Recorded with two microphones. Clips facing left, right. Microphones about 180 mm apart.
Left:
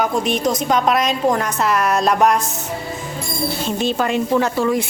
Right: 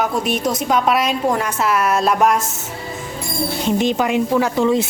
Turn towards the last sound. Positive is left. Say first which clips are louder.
# right 1 dB
turn(degrees=-20)  # may be behind; listen again after turning